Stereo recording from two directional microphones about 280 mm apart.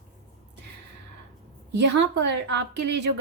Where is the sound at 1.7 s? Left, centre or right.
Right.